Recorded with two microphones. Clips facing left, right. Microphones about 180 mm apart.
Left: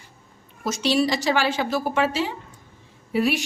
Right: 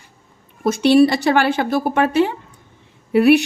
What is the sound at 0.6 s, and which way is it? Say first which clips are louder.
A woman's voice: right 9 dB; 55° right (ahead or behind).